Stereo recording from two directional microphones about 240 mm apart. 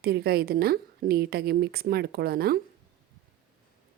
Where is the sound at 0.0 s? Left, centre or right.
Right.